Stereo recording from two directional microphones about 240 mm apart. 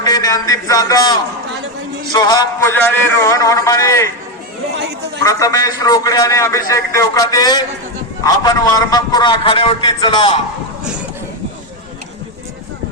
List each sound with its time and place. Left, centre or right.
0.0 s a man's voice: centre
2.1 s a man's voice: centre
5.2 s a man's voice: centre